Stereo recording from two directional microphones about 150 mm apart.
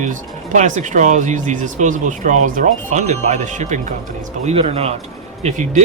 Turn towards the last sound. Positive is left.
turn(degrees=-50)  # may be behind; listen again after turning